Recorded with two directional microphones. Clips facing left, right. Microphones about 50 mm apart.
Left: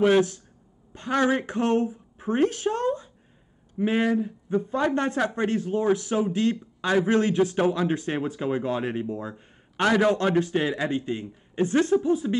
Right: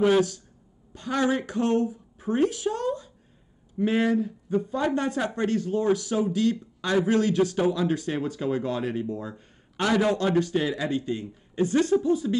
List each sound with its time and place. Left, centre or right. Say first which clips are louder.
0.9 s speech: left 2 dB; left
3.8 s a man's voice: even; centre; by 5.2 s left
5.3 s a man's voice: even; left
7.5 s a man's voice: left 1 dB; left